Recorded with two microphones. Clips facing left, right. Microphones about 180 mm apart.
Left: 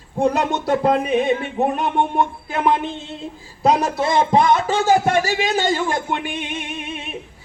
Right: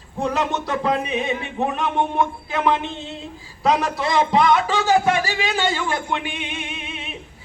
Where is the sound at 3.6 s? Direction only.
40° left (ahead or behind).